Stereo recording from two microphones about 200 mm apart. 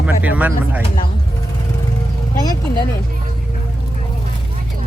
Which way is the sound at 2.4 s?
20° left (ahead or behind).